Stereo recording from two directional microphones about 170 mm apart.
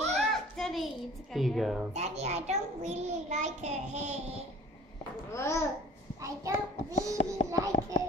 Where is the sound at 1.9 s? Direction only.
40° right (ahead or behind).